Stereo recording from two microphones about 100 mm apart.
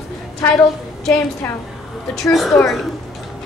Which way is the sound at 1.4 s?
20° left (ahead or behind).